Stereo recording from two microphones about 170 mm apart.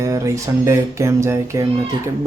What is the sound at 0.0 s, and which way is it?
A man's voice, 20° right (ahead or behind).